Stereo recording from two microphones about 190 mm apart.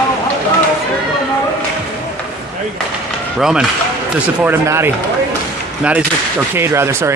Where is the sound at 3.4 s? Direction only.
5° right (ahead or behind).